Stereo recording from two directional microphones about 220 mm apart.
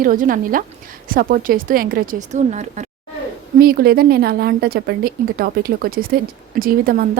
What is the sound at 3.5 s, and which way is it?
A woman's voice, 45° right (ahead or behind).